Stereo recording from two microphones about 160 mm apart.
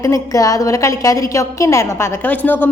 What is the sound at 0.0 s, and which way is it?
A woman's voice, 20° left (ahead or behind).